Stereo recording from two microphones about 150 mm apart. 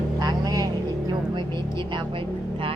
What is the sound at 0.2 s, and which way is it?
Vehicle, 25° right (ahead or behind).